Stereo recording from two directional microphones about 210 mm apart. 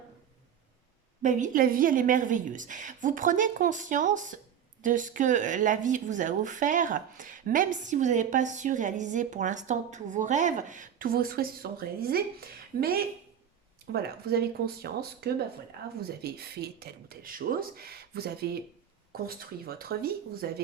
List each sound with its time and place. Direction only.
1.2 s speech: 35° right (ahead or behind)